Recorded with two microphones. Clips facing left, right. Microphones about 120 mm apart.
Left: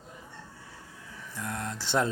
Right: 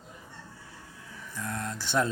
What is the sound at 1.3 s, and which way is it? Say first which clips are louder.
Speech: even; 25° left (ahead or behind).